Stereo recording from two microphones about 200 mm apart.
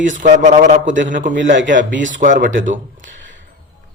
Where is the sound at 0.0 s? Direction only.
40° right (ahead or behind).